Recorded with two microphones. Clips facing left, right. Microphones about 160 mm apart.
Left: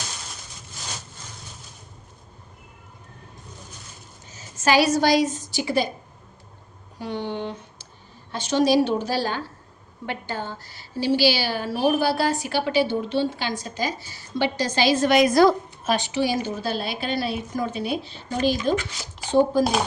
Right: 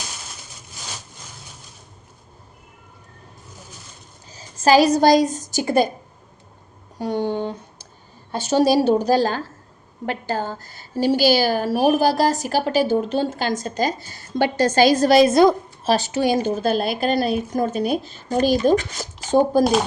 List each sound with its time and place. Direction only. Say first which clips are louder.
4.3 s a woman's voice: right 6 dB; 35° right (ahead or behind); by 5.9 s 50° right (ahead or behind)
7.0 s a sound: right 6 dB; 45° right (ahead or behind)
8.4 s a woman's voice: right 3 dB; 40° right (ahead or behind); by 15.9 s 25° right (ahead or behind)
15.9 s a woman's voice: right 4 dB; 40° right (ahead or behind)